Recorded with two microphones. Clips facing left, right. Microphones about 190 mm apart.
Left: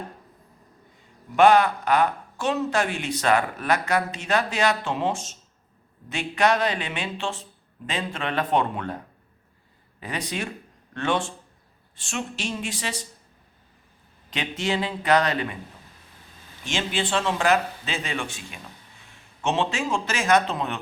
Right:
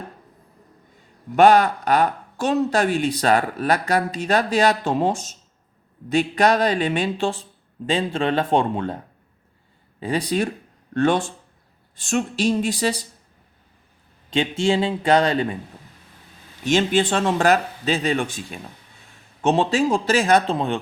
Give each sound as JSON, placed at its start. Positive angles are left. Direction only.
{"t": 1.4, "sound": "a man's voice", "side_deg": -40}
{"t": 10.0, "sound": "speech", "side_deg": -30}
{"t": 14.3, "sound": "a man's voice", "side_deg": -30}
{"t": 16.6, "sound": "speech", "side_deg": -45}